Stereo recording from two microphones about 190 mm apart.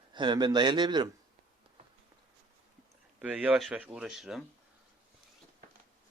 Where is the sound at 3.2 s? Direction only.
5° right (ahead or behind).